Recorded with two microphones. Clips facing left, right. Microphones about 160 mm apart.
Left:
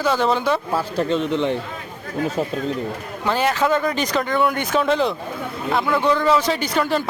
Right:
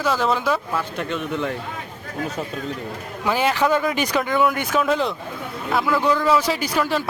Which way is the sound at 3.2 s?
15° right (ahead or behind).